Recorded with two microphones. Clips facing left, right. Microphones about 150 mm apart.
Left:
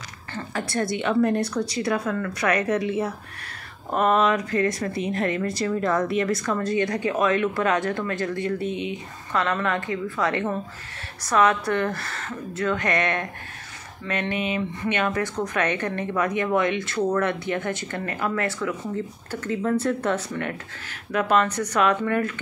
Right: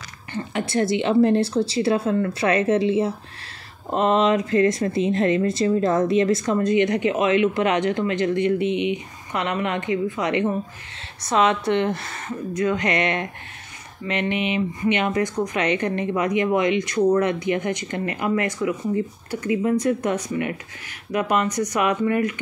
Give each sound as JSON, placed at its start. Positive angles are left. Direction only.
{"t": 0.3, "sound": "speech", "side_deg": -25}